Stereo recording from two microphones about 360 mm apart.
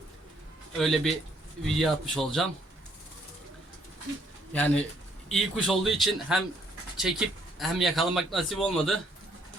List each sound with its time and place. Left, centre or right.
0.8 s a man's voice: centre
4.5 s a man's voice: centre